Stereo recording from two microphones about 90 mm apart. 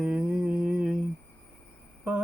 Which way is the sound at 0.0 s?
10° right (ahead or behind).